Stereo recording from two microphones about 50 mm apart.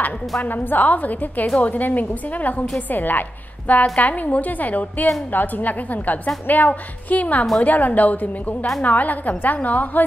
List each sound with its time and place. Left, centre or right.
0.4 s a woman's voice: left